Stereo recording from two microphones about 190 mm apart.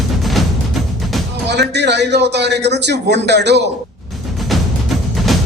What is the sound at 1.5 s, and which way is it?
Speech, 65° right (ahead or behind).